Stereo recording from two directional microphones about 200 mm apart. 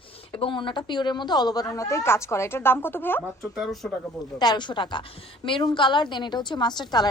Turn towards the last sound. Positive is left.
turn(degrees=20)  # may be behind; listen again after turning